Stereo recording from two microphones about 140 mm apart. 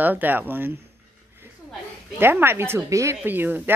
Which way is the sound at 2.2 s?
15° right (ahead or behind).